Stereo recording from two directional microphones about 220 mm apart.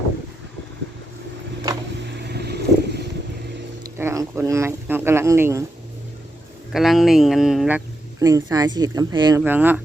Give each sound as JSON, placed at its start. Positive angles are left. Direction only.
{"t": 2.0, "sound": "vehicle", "side_deg": -50}
{"t": 3.8, "sound": "speech", "side_deg": -15}
{"t": 6.7, "sound": "speech", "side_deg": 0}
{"t": 8.2, "sound": "speech", "side_deg": -15}